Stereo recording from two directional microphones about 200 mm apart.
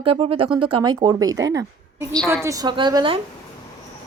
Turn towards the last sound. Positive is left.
turn(degrees=-25)  # may be behind; listen again after turning